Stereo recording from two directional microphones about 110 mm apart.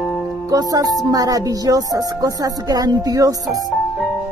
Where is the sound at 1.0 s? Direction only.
35° right (ahead or behind).